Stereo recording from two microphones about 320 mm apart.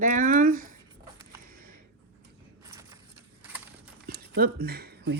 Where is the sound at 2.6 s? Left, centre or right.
Centre.